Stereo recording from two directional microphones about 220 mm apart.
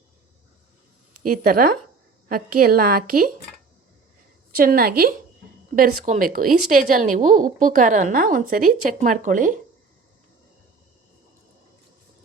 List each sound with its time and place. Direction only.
1.2 s a woman's voice: 40° right (ahead or behind)
4.5 s a woman's voice: 40° right (ahead or behind)